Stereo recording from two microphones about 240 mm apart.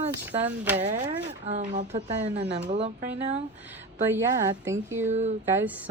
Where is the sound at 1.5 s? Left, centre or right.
Right.